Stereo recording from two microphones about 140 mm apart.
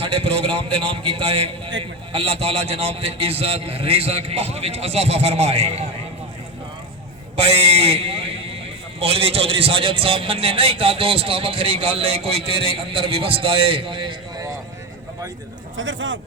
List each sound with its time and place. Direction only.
0.0 s a man's voice: 40° right (ahead or behind)
7.3 s a man's voice: 45° right (ahead or behind)